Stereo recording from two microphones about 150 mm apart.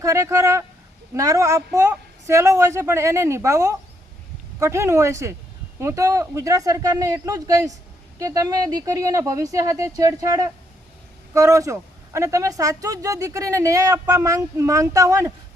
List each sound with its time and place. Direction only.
0.0 s speech: 20° right (ahead or behind)